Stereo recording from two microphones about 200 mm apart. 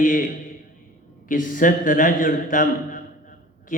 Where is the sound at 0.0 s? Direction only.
45° left (ahead or behind).